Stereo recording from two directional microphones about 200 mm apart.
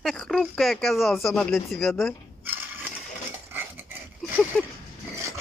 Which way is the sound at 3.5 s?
10° right (ahead or behind).